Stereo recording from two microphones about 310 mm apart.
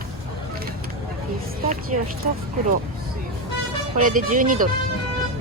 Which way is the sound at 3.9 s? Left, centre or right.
Right.